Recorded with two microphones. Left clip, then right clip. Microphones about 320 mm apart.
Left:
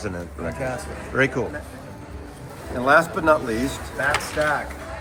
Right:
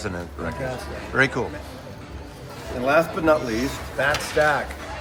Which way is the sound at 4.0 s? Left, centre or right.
Right.